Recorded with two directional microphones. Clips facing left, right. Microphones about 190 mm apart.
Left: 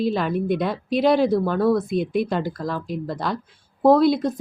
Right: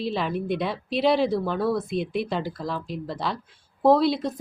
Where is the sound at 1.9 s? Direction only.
45° left (ahead or behind).